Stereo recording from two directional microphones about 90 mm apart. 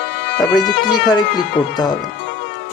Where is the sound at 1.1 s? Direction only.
55° left (ahead or behind).